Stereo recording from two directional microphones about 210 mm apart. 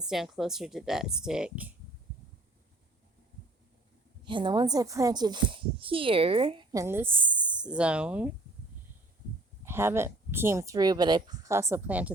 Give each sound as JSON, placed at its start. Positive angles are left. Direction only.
{"t": 0.1, "sound": "speech", "side_deg": 0}
{"t": 4.3, "sound": "speech", "side_deg": -20}
{"t": 9.6, "sound": "speech", "side_deg": -10}